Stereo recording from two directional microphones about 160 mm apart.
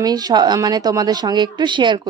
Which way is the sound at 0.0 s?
25° right (ahead or behind).